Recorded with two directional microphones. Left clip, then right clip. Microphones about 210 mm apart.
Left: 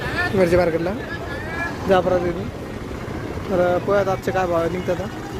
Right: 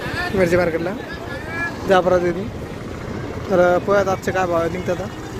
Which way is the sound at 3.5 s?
15° right (ahead or behind).